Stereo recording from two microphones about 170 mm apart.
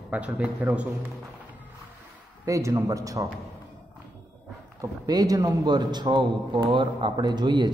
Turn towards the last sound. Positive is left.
turn(degrees=-25)  # may be behind; listen again after turning